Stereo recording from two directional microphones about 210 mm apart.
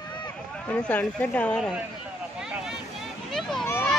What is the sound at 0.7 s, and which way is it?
Speech, 5° left (ahead or behind).